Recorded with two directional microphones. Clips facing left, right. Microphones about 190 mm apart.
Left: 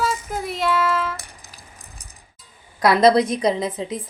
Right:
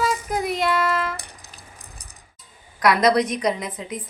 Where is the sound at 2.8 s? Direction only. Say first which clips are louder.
Left 3 dB; 30° left (ahead or behind).